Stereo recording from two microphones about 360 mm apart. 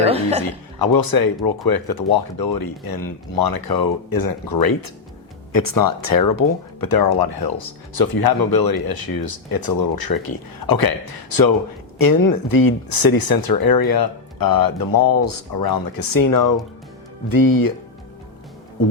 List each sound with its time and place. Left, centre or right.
0.0 s speech: centre
0.8 s speech: left
5.5 s speech: left